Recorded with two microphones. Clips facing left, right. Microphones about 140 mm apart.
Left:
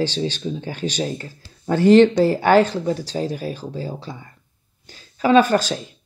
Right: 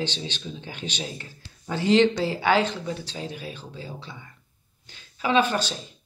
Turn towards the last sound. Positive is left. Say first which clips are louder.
# left 7 dB
turn(degrees=45)  # may be behind; listen again after turning